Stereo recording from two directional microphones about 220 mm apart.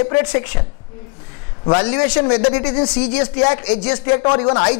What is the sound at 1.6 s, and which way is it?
A man's voice, 20° left (ahead or behind).